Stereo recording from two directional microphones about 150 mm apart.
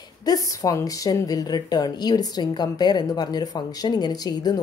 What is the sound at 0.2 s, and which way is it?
A woman's voice, 25° left (ahead or behind).